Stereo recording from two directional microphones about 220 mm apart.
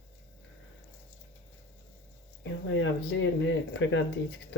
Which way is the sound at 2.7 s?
60° left (ahead or behind).